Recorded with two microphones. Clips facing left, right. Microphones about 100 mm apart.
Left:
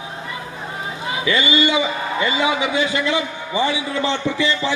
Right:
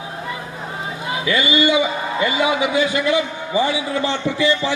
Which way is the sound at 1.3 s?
25° left (ahead or behind).